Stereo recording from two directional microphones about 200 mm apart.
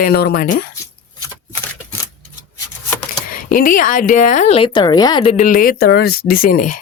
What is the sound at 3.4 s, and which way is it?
Speech, 45° left (ahead or behind).